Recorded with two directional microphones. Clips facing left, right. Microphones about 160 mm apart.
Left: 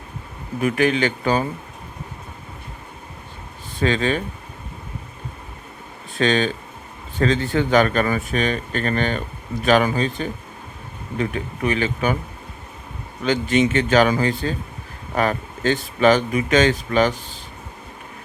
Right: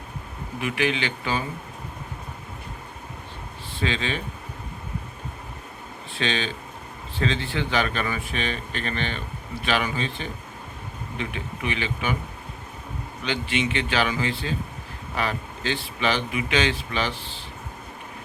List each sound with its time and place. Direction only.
0.6 s speech: 45° left (ahead or behind)
3.8 s speech: 45° left (ahead or behind)
6.1 s speech: 45° left (ahead or behind)
13.2 s speech: 45° left (ahead or behind)